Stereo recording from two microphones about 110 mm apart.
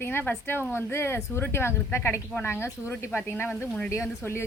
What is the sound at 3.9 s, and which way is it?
Speech, 25° left (ahead or behind).